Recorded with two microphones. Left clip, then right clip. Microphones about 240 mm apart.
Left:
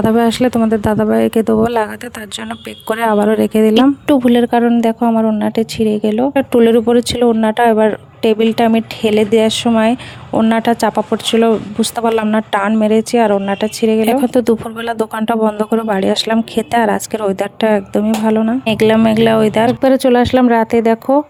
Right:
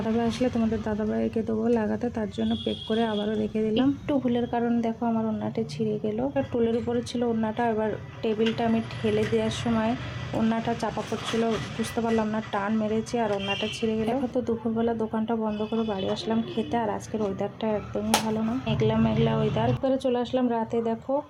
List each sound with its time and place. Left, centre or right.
0.2 s a woman's voice: left